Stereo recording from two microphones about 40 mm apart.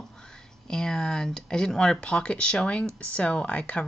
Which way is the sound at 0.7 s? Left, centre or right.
Centre.